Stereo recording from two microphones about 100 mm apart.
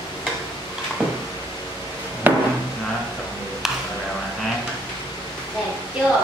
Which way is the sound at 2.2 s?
15° right (ahead or behind).